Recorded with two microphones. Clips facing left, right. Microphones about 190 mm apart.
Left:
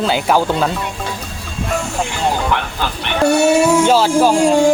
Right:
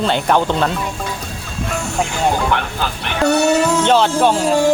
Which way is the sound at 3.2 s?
10° left (ahead or behind).